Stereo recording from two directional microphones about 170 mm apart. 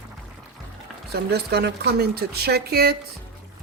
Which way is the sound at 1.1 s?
75° right (ahead or behind).